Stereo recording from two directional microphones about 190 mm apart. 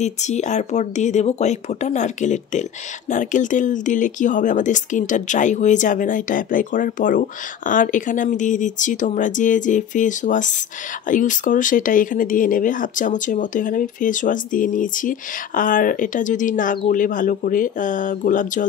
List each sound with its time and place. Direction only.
0.0 s speech: 40° left (ahead or behind)